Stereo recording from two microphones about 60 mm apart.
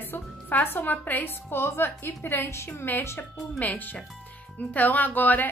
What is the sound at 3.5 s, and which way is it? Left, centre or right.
Speech, left.